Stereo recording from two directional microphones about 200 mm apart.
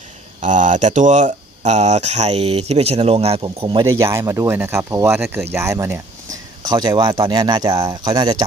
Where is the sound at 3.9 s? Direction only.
15° right (ahead or behind).